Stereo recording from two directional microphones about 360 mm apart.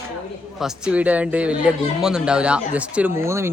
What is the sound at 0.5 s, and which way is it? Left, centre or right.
Speech, centre.